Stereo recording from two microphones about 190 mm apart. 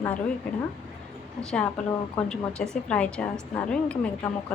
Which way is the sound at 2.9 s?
5° left (ahead or behind).